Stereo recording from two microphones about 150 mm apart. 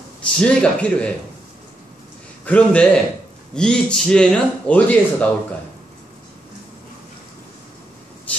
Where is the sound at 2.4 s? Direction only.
10° left (ahead or behind).